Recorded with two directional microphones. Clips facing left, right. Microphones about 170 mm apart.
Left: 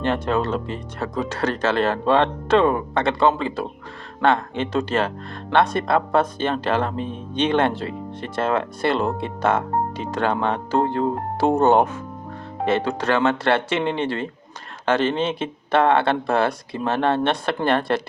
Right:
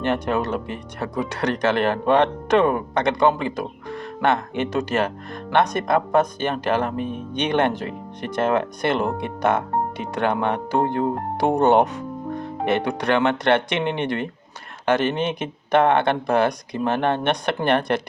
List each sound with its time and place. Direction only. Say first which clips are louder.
0.1 s speech: even; 15° right (ahead or behind)